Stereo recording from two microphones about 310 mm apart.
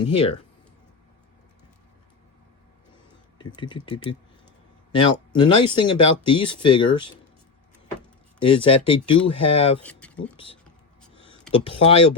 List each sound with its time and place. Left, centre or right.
0.0 s speech: centre
3.3 s speech: centre
8.4 s speech: centre
9.8 s speech: centre
11.6 s speech: centre